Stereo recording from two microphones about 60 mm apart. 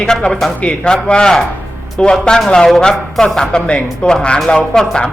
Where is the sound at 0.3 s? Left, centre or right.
Centre.